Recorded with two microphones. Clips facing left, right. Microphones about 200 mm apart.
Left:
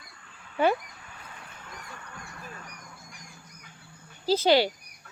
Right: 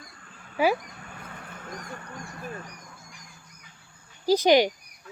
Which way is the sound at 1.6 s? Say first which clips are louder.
Right 7 dB; 45° right (ahead or behind).